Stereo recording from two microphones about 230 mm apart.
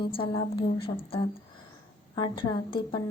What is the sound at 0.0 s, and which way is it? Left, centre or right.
Speech, left.